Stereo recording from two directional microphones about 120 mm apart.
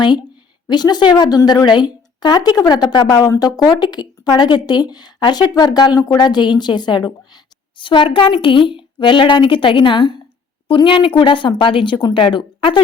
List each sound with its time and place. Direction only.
0.0 s a woman's voice: 40° left (ahead or behind)